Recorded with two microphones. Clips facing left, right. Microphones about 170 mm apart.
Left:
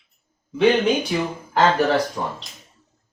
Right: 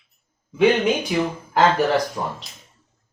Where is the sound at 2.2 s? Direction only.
5° right (ahead or behind).